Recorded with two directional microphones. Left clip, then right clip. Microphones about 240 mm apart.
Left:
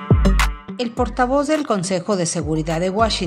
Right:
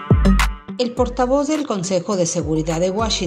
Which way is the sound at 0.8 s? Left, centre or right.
Centre.